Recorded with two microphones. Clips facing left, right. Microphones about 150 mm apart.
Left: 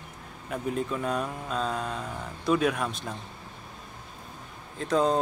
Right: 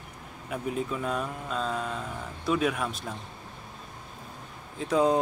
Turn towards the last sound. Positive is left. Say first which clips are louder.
# right 1 dB
turn(degrees=-10)  # may be behind; listen again after turning